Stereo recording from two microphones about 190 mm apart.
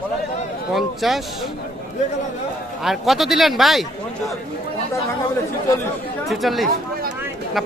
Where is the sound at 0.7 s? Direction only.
Centre (ahead or behind).